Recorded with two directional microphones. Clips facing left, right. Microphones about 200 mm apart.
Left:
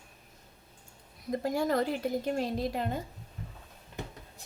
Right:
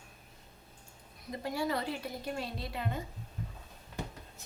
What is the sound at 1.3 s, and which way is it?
Speech, 45° left (ahead or behind).